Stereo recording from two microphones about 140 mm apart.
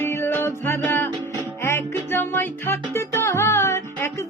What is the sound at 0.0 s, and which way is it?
Music, 15° left (ahead or behind).